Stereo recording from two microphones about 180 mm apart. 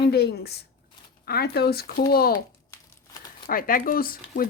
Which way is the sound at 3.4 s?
50° left (ahead or behind).